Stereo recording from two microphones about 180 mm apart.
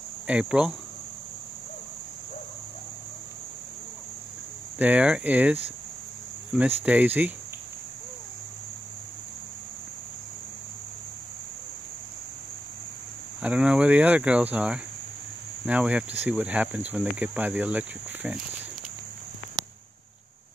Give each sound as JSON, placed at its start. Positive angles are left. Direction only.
{"t": 0.3, "sound": "speech", "side_deg": -5}
{"t": 4.7, "sound": "speech", "side_deg": -10}
{"t": 13.4, "sound": "speech", "side_deg": -5}
{"t": 19.6, "sound": "a sound", "side_deg": -20}